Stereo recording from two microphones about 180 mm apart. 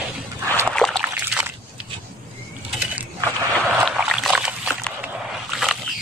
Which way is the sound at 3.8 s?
Centre (ahead or behind).